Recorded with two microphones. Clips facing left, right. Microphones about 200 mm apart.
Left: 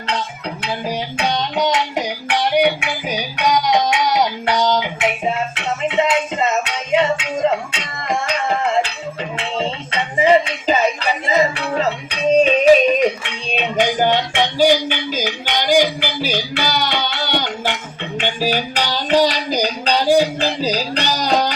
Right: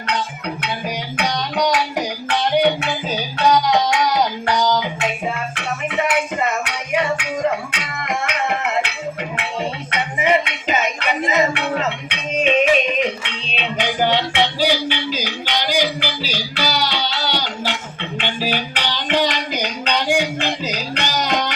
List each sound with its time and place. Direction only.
1.1 s music: 25° left (ahead or behind)